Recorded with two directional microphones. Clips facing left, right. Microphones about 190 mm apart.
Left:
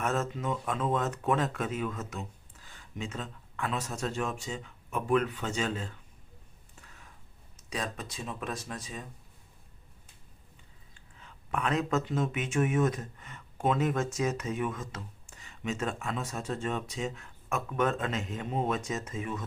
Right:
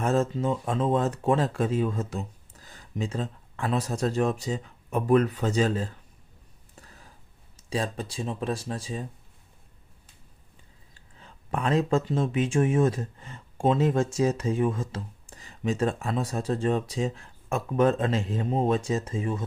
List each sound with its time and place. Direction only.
0.0 s speech: 30° right (ahead or behind)
6.8 s a sound: 35° right (ahead or behind)
7.7 s speech: 30° right (ahead or behind)
10.9 s speech: 35° right (ahead or behind)